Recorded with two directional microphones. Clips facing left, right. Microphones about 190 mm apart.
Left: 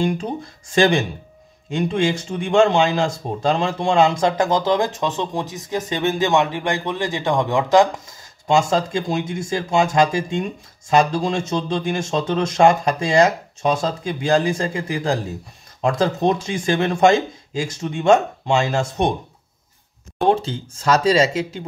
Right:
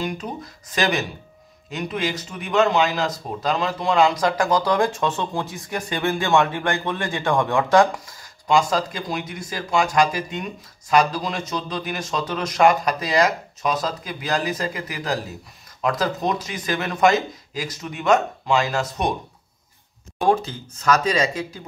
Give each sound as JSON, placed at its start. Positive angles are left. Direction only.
{"t": 0.7, "sound": "speech", "side_deg": 25}
{"t": 20.2, "sound": "speech", "side_deg": 25}